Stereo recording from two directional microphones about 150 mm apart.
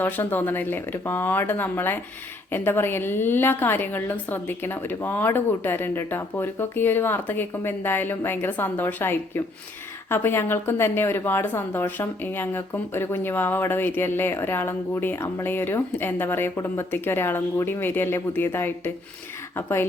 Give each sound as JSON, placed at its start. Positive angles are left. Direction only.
{"t": 0.0, "sound": "speech", "side_deg": 10}